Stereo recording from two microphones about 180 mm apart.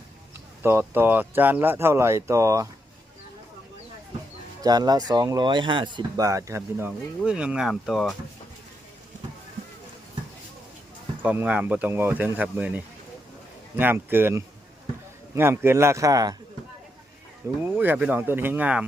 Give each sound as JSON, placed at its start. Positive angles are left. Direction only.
{"t": 0.6, "sound": "speech", "side_deg": -15}
{"t": 4.6, "sound": "speech", "side_deg": -20}
{"t": 11.2, "sound": "speech", "side_deg": -10}
{"t": 17.6, "sound": "speech", "side_deg": -10}